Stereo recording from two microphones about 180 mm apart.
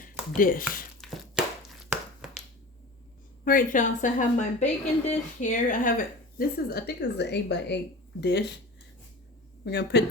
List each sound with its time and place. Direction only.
0.0 s speech: 50° left (ahead or behind)
1.9 s a sound: 5° right (ahead or behind)
3.4 s a woman's voice: 50° left (ahead or behind)
6.3 s speech: 60° left (ahead or behind)
9.6 s speech: 65° left (ahead or behind)